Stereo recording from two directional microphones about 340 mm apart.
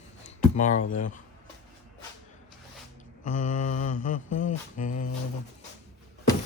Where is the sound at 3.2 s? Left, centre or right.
Left.